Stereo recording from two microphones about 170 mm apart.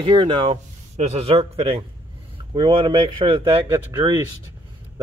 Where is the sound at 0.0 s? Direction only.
30° right (ahead or behind).